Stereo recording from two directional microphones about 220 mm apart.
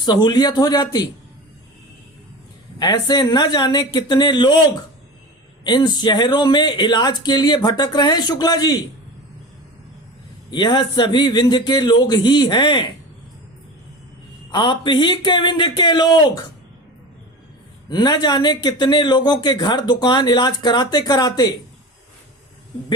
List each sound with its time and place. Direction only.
0.0 s speech: 20° left (ahead or behind)
2.7 s speech: 20° left (ahead or behind)
10.5 s speech: 20° left (ahead or behind)
14.5 s speech: 20° left (ahead or behind)
17.8 s speech: 20° left (ahead or behind)